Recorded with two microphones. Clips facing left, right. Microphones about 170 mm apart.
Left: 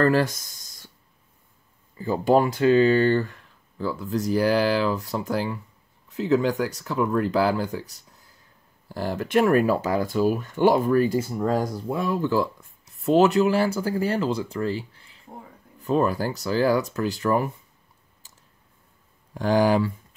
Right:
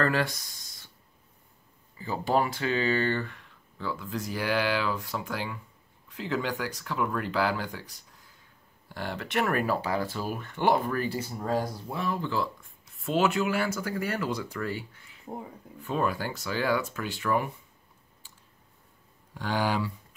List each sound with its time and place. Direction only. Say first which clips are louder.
0.0 s speech: left 7 dB; 40° left (ahead or behind)
2.0 s speech: left 7 dB; 45° left (ahead or behind)
8.8 s speech: left 7 dB; 40° left (ahead or behind)
19.3 s speech: left 9 dB; 45° left (ahead or behind)